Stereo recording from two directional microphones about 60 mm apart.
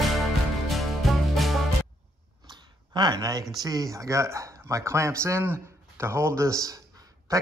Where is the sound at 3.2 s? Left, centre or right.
Right.